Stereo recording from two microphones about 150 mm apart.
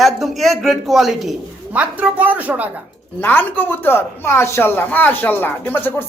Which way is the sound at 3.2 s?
15° left (ahead or behind).